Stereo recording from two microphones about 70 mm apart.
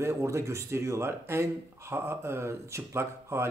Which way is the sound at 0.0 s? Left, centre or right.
Right.